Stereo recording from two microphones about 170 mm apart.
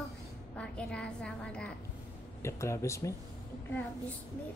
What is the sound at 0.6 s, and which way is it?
A woman's voice, 5° left (ahead or behind).